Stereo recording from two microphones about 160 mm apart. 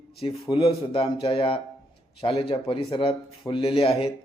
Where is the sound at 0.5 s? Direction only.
35° left (ahead or behind).